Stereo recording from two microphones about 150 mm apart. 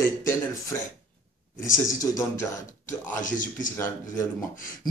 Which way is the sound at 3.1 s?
60° left (ahead or behind).